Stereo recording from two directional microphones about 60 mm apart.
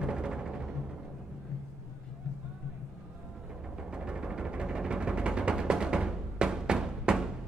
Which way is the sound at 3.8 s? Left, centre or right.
Centre.